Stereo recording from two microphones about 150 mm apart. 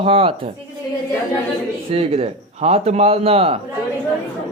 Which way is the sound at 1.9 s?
40° right (ahead or behind).